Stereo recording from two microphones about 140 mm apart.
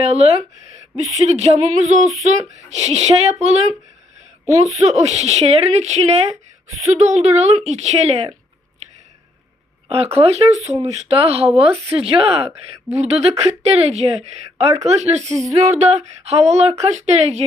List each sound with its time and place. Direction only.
0.0 s speech: 50° right (ahead or behind)
9.9 s speech: 45° right (ahead or behind)